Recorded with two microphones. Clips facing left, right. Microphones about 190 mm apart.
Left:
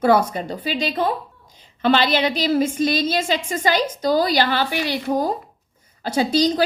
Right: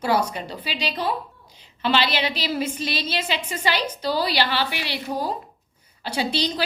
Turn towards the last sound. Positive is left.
turn(degrees=45)  # may be behind; listen again after turning